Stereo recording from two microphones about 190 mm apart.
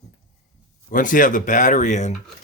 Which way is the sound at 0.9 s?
45° left (ahead or behind).